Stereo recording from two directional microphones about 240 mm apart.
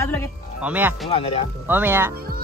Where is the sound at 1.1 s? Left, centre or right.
Left.